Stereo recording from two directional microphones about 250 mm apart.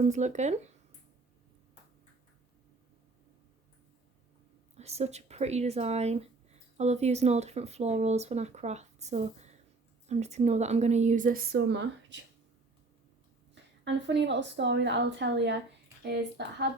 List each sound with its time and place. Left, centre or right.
0.0 s speech: right
4.8 s speech: right
13.8 s a woman's voice: right